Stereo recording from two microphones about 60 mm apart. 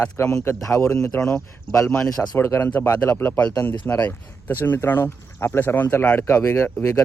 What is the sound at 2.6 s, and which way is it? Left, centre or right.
Speech, left.